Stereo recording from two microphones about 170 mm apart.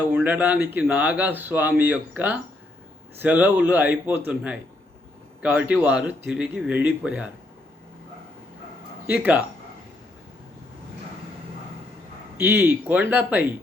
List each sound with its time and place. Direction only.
0.2 s speech: 10° right (ahead or behind)
9.0 s speech: 10° right (ahead or behind)
12.4 s speech: 10° right (ahead or behind)